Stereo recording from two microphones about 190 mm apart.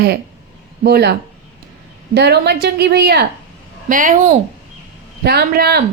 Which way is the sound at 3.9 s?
45° right (ahead or behind).